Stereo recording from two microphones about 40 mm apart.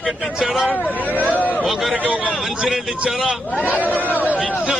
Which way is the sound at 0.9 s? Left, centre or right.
Left.